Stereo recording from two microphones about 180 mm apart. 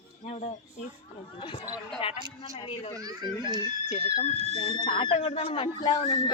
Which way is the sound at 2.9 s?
20° right (ahead or behind).